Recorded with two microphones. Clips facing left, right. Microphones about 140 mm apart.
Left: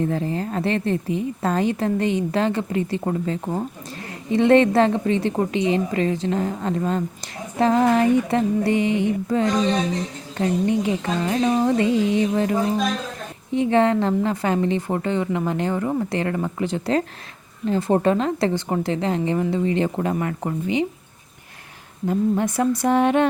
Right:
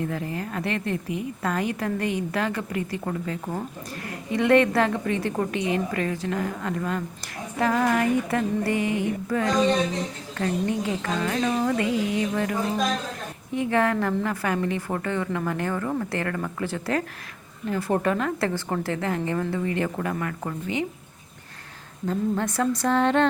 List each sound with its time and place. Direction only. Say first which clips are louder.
0.0 s a woman's voice: left 6 dB; 30° left (ahead or behind)
22.0 s speech: left 5 dB; 15° left (ahead or behind)